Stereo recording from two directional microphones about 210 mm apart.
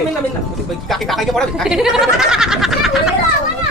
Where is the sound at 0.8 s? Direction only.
Centre (ahead or behind).